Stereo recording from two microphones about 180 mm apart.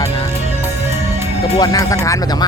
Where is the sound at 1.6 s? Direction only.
20° left (ahead or behind).